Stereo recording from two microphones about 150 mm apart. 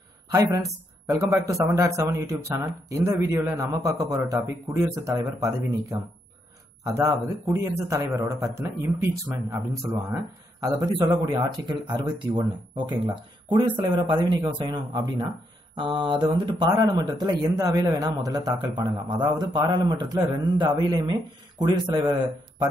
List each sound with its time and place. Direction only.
0.3 s a woman's voice: 20° right (ahead or behind)